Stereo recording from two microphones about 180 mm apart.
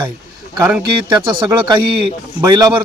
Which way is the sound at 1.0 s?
25° right (ahead or behind).